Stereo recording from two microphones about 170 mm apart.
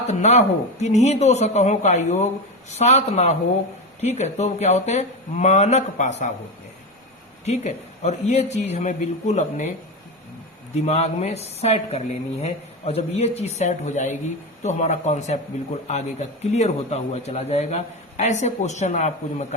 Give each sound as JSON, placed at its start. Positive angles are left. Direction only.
{"t": 0.1, "sound": "a man's voice", "side_deg": 40}
{"t": 7.4, "sound": "a man's voice", "side_deg": 40}
{"t": 10.8, "sound": "a man's voice", "side_deg": 40}